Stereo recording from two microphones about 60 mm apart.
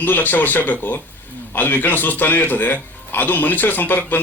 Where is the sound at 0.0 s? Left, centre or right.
Left.